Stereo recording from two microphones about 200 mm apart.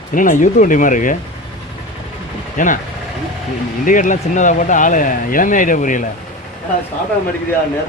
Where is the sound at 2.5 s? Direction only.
40° left (ahead or behind).